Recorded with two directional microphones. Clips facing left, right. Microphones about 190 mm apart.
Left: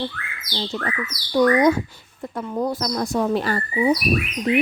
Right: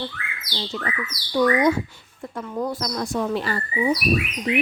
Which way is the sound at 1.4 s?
40° left (ahead or behind).